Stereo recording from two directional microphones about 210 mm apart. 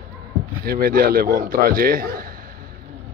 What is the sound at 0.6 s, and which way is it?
A man's voice, 45° right (ahead or behind).